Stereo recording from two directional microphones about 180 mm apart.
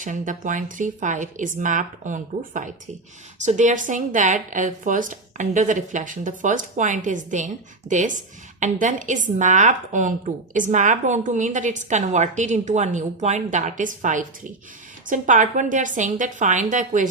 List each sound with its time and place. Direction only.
0.0 s a woman's voice: 45° right (ahead or behind)